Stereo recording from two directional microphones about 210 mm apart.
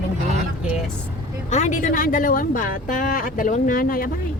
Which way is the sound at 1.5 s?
35° left (ahead or behind).